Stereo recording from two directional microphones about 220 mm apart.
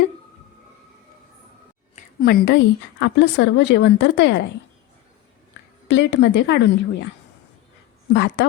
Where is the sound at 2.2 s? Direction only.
50° left (ahead or behind).